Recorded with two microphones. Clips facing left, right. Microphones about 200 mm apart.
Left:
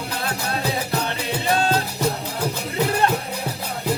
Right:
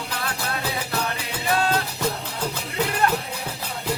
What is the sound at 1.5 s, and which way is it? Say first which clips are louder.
Music: left 1 dB; 25° left (ahead or behind).